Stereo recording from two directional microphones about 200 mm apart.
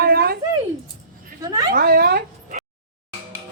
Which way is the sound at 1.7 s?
50° right (ahead or behind).